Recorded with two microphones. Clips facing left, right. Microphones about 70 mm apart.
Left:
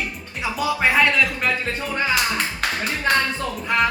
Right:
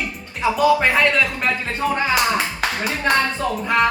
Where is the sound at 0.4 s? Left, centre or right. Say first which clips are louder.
Right 5 dB; centre.